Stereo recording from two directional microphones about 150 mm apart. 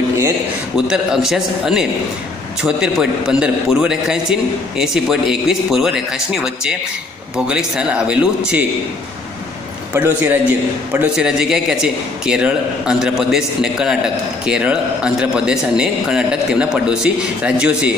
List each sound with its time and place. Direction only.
0.7 s a man's voice: 5° right (ahead or behind)
9.9 s a man's voice: 10° right (ahead or behind)